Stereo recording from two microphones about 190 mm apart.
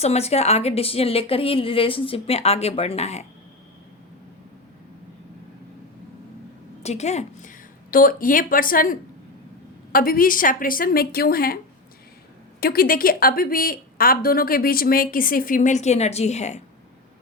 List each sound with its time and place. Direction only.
0.0 s a woman's voice: 35° left (ahead or behind)
6.8 s a woman's voice: 35° left (ahead or behind)